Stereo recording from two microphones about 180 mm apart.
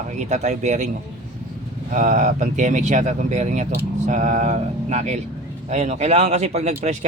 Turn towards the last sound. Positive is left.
turn(degrees=-40)  # may be behind; listen again after turning